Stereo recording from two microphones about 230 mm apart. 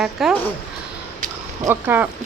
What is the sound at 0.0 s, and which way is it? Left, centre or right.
Speech, centre.